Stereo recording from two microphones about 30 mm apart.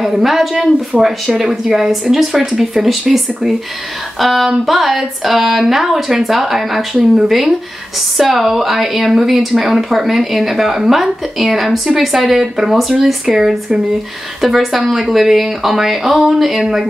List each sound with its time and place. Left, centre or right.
0.0 s a woman's voice: centre